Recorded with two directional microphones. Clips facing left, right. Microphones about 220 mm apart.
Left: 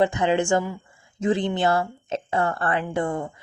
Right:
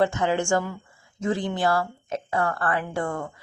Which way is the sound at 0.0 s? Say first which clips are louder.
Left 2 dB; 15° left (ahead or behind).